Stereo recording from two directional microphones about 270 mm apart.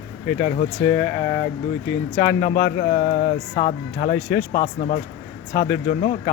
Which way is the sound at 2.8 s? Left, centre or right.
Left.